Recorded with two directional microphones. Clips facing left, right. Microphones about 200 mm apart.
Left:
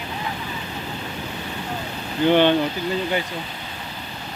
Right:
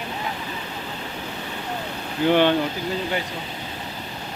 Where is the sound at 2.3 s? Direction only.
5° right (ahead or behind).